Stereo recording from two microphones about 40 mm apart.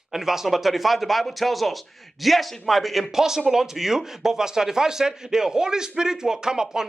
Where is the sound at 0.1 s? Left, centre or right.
Centre.